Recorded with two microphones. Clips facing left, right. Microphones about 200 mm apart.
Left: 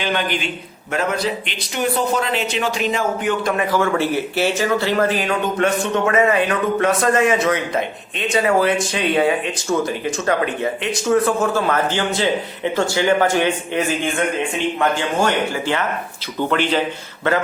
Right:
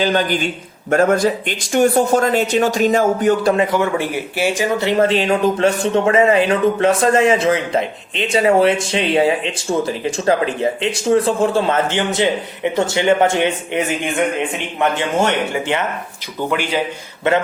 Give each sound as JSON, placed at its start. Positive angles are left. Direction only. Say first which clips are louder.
{"t": 0.0, "sound": "a man's voice", "louder": "right 5 dB", "side_deg": -40}
{"t": 16.5, "sound": "speech", "louder": "left 1 dB", "side_deg": -10}